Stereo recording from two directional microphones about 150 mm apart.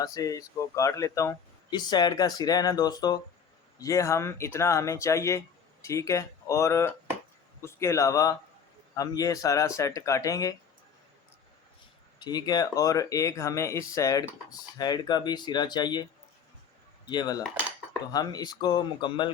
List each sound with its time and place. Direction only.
0.0 s speech: 25° left (ahead or behind)
12.2 s speech: 25° left (ahead or behind)
17.1 s speech: 25° left (ahead or behind)